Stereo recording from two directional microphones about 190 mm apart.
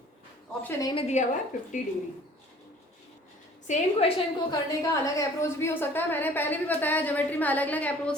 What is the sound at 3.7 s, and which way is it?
Speech, 30° left (ahead or behind).